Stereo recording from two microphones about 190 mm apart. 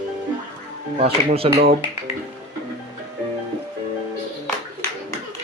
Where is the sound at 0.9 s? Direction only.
30° right (ahead or behind).